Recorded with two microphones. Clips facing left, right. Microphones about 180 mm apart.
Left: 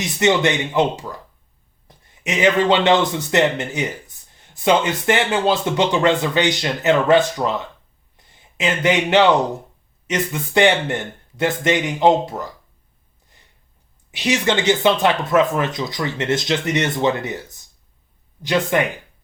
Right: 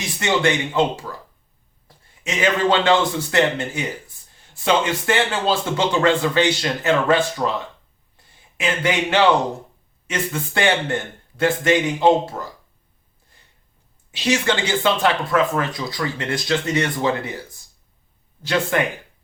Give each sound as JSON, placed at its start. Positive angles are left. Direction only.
{"t": 0.0, "sound": "a man's voice", "side_deg": 20}
{"t": 14.1, "sound": "speech", "side_deg": 15}